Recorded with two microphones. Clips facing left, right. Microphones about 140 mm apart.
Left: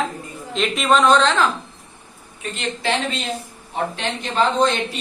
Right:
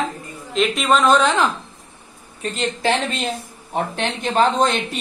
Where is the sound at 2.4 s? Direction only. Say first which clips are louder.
Right 4 dB; 40° right (ahead or behind).